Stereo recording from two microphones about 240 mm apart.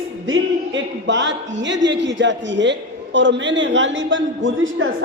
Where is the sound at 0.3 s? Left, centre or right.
Right.